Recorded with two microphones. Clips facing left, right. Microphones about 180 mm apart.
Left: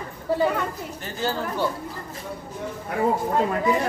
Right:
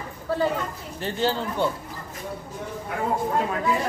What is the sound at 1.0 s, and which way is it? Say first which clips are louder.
Speech: right 3 dB; 30° right (ahead or behind).